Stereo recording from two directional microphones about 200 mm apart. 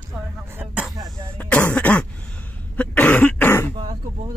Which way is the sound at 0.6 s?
10° right (ahead or behind).